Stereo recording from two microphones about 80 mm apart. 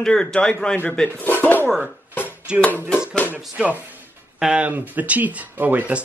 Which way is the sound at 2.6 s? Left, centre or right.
Centre.